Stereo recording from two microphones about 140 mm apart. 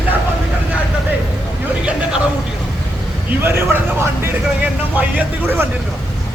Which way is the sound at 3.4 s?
15° right (ahead or behind).